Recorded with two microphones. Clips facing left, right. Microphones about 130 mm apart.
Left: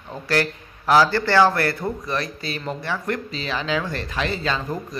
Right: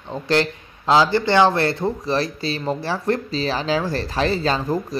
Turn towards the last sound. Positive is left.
turn(degrees=-35)  # may be behind; listen again after turning